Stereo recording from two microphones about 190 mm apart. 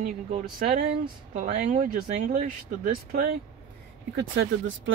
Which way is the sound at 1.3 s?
45° right (ahead or behind).